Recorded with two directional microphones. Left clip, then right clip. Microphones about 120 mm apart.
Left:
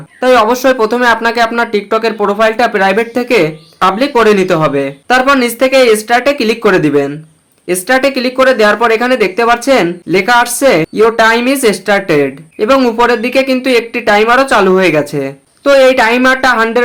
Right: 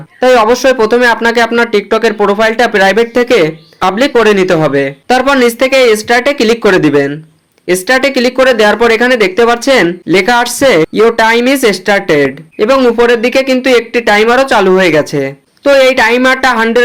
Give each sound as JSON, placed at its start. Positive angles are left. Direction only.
{"t": 0.2, "sound": "speech", "side_deg": -20}